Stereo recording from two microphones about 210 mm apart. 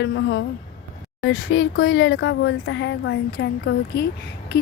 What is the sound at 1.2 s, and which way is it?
A woman's voice, 70° left (ahead or behind).